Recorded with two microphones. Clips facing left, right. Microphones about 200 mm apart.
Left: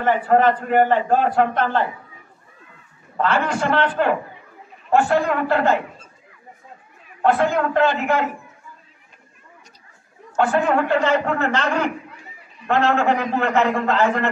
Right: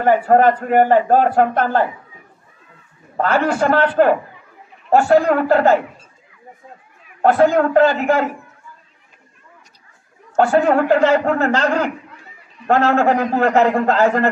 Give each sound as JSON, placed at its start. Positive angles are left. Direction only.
{"t": 0.0, "sound": "a man's voice", "side_deg": -45}
{"t": 3.2, "sound": "a man's voice", "side_deg": -45}
{"t": 7.2, "sound": "a man's voice", "side_deg": -40}
{"t": 10.3, "sound": "a man's voice", "side_deg": -40}